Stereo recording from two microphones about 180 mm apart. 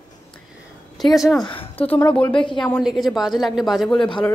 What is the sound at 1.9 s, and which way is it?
A woman's voice, 10° left (ahead or behind).